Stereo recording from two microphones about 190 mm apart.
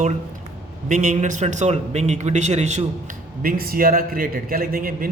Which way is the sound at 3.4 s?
50° right (ahead or behind).